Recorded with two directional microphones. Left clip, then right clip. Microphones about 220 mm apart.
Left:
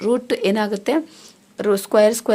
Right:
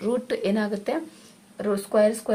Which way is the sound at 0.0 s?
35° left (ahead or behind).